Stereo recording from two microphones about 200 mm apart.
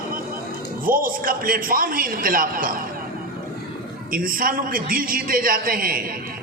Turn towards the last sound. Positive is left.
turn(degrees=-45)  # may be behind; listen again after turning